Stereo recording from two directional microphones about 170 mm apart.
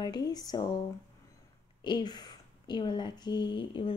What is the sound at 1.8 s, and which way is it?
A woman's voice, 25° left (ahead or behind).